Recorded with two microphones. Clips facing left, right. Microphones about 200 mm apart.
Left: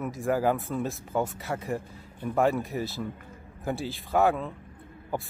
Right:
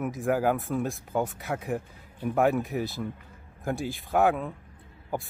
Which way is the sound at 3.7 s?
15° right (ahead or behind).